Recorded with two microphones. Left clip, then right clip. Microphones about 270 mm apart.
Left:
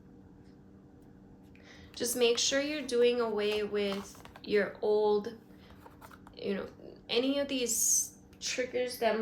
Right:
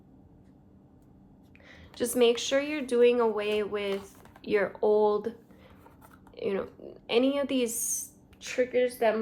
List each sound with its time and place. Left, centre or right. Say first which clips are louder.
1.7 s a woman's voice: right 5 dB; right
6.3 s a woman's voice: right 5 dB; centre